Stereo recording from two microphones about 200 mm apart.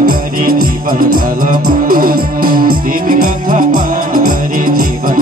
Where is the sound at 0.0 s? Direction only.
45° right (ahead or behind).